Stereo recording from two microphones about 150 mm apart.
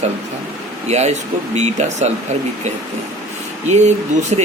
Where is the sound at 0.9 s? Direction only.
45° right (ahead or behind).